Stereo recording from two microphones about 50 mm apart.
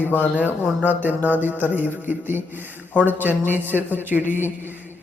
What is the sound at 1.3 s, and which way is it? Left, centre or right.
Speech, right.